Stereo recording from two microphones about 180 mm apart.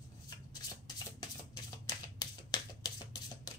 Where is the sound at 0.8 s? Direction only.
20° left (ahead or behind).